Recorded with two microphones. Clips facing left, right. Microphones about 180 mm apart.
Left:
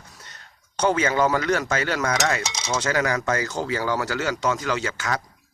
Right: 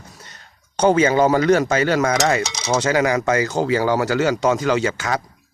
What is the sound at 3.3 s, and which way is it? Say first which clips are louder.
Speech: right 7 dB; 90° right.